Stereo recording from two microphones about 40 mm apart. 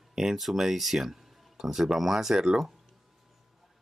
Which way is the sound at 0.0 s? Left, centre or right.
Centre.